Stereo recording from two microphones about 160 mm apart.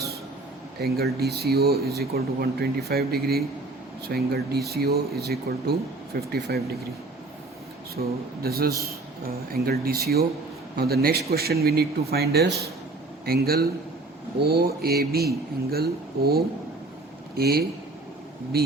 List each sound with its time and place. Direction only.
0.8 s speech: 75° right (ahead or behind)
7.9 s speech: 75° right (ahead or behind); by 12.7 s 90° right
13.2 s speech: 75° right (ahead or behind)